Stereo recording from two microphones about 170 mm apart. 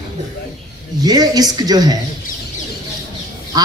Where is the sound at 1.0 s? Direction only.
20° right (ahead or behind).